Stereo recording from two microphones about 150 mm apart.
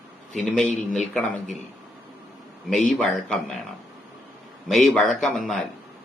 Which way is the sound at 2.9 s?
5° left (ahead or behind).